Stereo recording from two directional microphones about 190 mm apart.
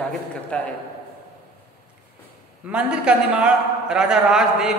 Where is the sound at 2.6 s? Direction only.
5° right (ahead or behind).